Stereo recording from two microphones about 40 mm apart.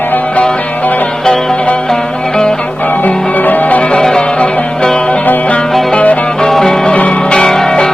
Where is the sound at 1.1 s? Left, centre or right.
Centre.